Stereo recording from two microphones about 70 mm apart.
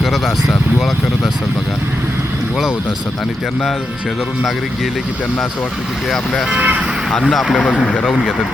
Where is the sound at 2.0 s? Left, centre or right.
Right.